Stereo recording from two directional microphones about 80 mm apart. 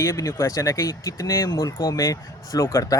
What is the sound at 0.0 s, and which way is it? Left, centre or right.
Speech, left.